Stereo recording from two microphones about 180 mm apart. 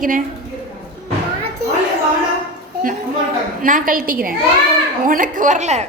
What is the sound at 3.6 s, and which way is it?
A woman's voice, 50° right (ahead or behind).